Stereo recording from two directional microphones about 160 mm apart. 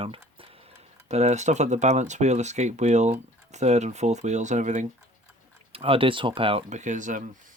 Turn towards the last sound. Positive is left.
turn(degrees=-50)  # may be behind; listen again after turning